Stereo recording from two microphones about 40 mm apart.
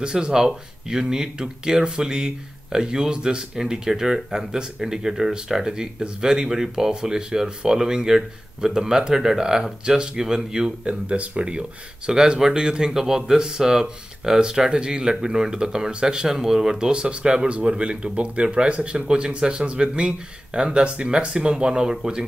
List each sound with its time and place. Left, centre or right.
0.0 s speech: centre
10.9 s speech: right
12.1 s speech: centre